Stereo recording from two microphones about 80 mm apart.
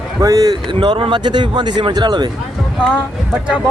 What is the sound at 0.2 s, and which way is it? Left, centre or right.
Speech, right.